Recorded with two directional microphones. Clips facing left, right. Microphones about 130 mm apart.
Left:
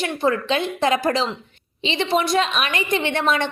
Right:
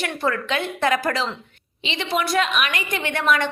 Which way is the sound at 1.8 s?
30° left (ahead or behind).